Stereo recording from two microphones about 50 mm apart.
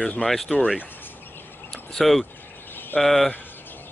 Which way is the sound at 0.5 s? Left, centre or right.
Centre.